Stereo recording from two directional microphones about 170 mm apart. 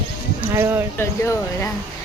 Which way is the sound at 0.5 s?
15° right (ahead or behind).